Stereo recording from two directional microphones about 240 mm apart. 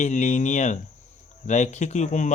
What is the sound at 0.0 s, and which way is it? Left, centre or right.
Speech, left.